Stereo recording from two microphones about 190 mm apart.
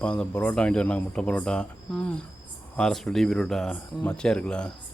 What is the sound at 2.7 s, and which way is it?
Speech, centre (ahead or behind).